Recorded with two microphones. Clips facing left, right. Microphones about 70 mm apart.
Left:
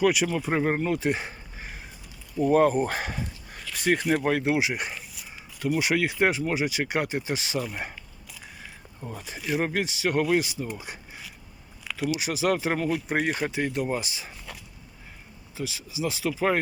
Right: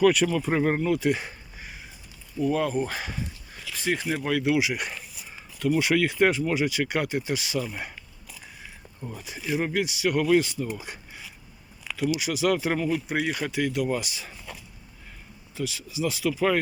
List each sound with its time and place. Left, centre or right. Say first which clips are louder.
0.0 s speech: right 3 dB; centre
0.3 s speech: right 1 dB; left
2.4 s speech: left 4 dB; left
3.5 s a sound: left 3 dB; left
4.3 s speech: even; left
9.1 s speech: even; left
10.4 s speech: right 2 dB; centre
12.1 s speech: even; left
13.3 s speech: right 1 dB; left
15.5 s speech: right 2 dB; left